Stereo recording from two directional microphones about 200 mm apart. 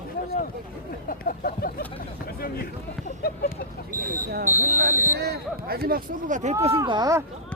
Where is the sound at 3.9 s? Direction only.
45° right (ahead or behind).